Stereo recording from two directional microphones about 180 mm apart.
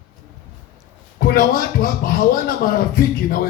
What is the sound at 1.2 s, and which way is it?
Speech, 55° left (ahead or behind).